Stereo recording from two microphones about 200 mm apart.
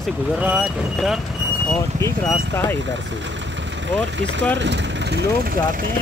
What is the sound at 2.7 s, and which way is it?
Speech, 65° right (ahead or behind).